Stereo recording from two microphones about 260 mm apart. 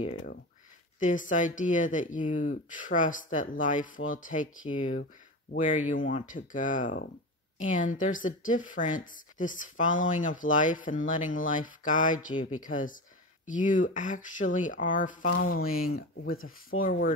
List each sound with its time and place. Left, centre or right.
0.9 s speech: left
16.3 s speech: left
16.8 s speech: left